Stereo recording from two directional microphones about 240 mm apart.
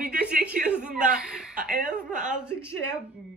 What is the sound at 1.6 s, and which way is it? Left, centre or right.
Speech, right.